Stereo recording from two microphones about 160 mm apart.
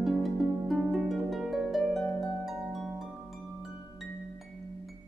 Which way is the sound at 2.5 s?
Centre (ahead or behind).